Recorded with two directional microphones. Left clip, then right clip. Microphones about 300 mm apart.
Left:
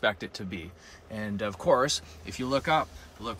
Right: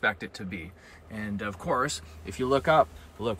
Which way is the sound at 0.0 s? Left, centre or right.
Centre.